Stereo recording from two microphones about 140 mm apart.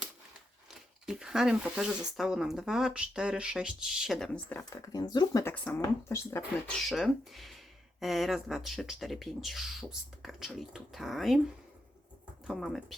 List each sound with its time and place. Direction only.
1.0 s speech: 5° right (ahead or behind)
4.7 s speech: 25° left (ahead or behind)
6.7 s speech: centre (ahead or behind)
12.5 s speech: centre (ahead or behind)